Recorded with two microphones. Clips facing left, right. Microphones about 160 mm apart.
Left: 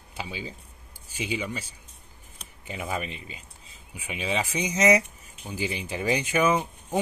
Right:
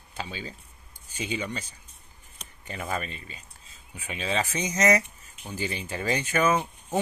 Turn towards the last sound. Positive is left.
turn(degrees=10)  # may be behind; listen again after turning